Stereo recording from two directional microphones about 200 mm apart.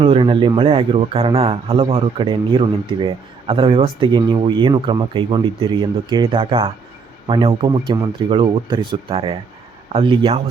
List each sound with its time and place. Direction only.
0.0 s a man's voice: 25° right (ahead or behind)